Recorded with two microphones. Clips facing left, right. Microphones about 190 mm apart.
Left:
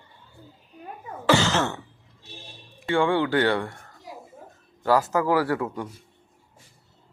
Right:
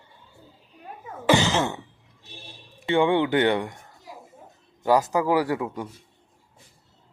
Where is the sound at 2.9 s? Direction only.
20° right (ahead or behind).